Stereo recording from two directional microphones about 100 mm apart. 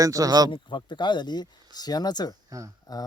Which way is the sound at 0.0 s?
35° right (ahead or behind).